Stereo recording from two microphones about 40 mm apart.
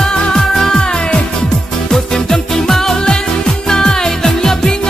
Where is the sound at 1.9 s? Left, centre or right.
Centre.